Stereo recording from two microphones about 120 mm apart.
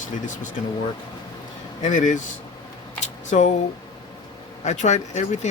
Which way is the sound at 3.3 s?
70° left (ahead or behind).